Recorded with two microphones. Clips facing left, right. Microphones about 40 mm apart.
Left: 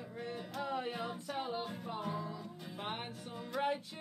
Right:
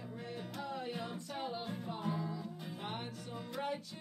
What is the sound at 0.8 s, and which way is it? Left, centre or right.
Music, centre.